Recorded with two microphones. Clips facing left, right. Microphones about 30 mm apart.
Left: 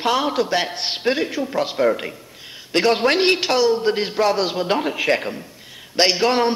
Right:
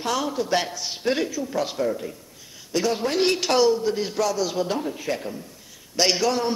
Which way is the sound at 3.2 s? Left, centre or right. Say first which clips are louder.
Left 4 dB; left.